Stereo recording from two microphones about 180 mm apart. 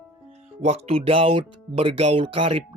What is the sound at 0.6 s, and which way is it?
Speech, 35° right (ahead or behind).